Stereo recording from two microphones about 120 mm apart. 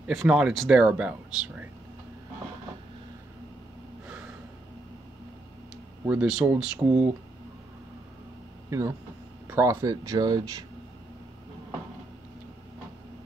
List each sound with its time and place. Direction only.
0.0 s speech: 5° right (ahead or behind)
6.0 s speech: 5° right (ahead or behind)
8.6 s speech: 25° right (ahead or behind)